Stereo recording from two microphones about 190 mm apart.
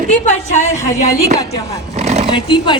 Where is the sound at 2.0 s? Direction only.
35° right (ahead or behind).